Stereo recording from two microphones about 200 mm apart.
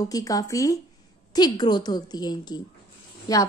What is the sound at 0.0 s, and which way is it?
A woman's voice, 15° left (ahead or behind).